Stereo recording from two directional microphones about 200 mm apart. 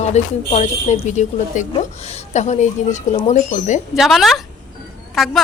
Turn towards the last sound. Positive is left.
turn(degrees=0)  # may be behind; listen again after turning